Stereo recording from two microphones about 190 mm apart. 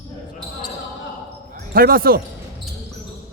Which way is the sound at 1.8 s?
50° right (ahead or behind).